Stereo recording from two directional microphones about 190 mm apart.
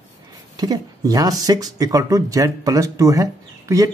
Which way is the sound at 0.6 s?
20° right (ahead or behind).